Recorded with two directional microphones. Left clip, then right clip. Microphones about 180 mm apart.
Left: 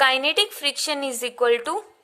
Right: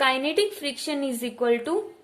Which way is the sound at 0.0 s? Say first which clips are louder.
Left 3 dB; 40° left (ahead or behind).